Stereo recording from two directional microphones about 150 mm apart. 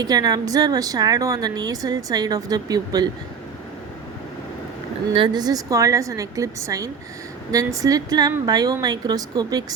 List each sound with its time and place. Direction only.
0.0 s a woman's voice: 25° right (ahead or behind)
5.1 s a woman's voice: 30° right (ahead or behind)